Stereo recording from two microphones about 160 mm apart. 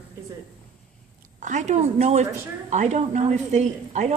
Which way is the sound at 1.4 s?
50° right (ahead or behind).